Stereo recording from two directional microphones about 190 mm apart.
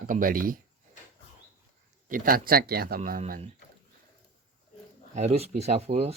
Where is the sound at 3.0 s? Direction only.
45° right (ahead or behind).